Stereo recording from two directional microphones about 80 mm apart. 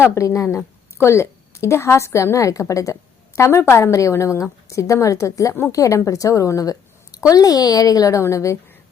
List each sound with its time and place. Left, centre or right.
0.0 s a woman's voice: left